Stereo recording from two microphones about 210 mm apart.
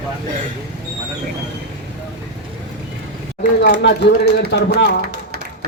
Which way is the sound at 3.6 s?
45° left (ahead or behind).